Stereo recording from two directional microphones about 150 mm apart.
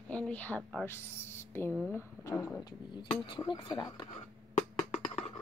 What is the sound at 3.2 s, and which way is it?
Speech, 30° left (ahead or behind).